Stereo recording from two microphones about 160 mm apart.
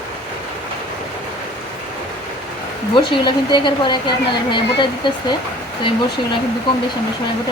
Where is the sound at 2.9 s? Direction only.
30° left (ahead or behind).